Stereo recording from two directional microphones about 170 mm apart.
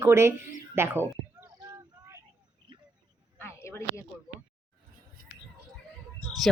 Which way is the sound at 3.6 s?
15° left (ahead or behind).